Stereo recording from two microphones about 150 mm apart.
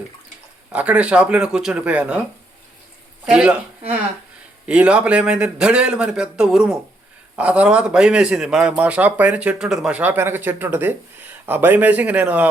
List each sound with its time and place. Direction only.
0.7 s speech: 10° right (ahead or behind)
3.2 s speech: 5° right (ahead or behind)
4.6 s speech: 10° right (ahead or behind)